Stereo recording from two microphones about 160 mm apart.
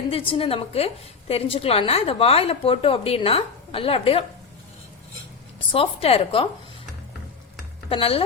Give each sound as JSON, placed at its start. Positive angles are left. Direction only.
{"t": 0.1, "sound": "a woman's voice", "side_deg": 35}
{"t": 5.5, "sound": "a woman's voice", "side_deg": 35}
{"t": 7.9, "sound": "a woman's voice", "side_deg": 35}